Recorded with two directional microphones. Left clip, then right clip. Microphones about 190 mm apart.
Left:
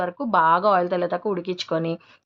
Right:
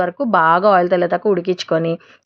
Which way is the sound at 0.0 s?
25° right (ahead or behind).